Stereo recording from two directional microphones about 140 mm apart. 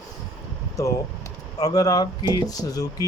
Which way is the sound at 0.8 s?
25° left (ahead or behind).